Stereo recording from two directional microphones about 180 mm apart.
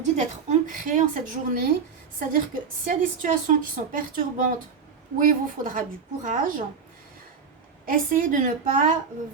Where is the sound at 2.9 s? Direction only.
50° right (ahead or behind).